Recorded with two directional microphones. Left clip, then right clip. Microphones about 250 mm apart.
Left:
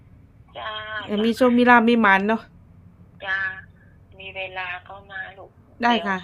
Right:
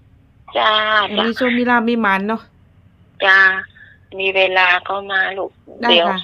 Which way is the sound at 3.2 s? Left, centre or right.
Right.